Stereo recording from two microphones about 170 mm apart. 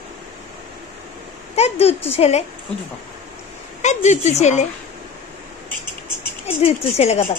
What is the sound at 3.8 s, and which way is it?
Speech, 45° left (ahead or behind).